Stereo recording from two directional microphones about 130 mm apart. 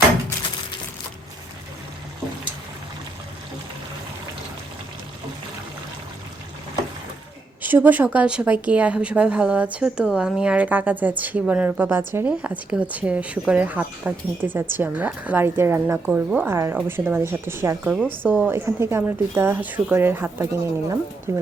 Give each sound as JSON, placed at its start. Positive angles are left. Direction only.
{"t": 7.6, "sound": "a woman's voice", "side_deg": -15}